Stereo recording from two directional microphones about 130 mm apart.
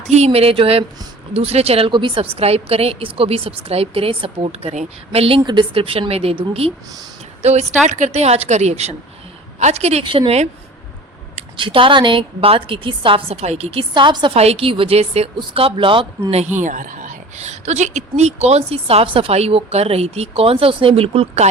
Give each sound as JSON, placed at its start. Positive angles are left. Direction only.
{"t": 0.3, "sound": "a woman's voice", "side_deg": -45}
{"t": 7.9, "sound": "a woman's voice", "side_deg": -70}
{"t": 10.0, "sound": "speech", "side_deg": -45}
{"t": 11.5, "sound": "a woman's voice", "side_deg": -40}
{"t": 14.3, "sound": "a woman's voice", "side_deg": -50}
{"t": 16.4, "sound": "speech", "side_deg": -70}